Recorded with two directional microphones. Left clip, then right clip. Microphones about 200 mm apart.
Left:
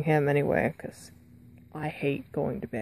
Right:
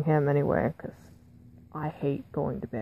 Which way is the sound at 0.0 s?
15° left (ahead or behind).